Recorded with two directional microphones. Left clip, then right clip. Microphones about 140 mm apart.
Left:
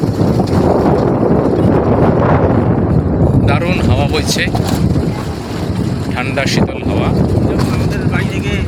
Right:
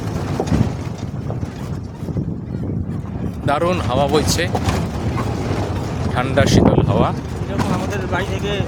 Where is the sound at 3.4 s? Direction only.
35° right (ahead or behind).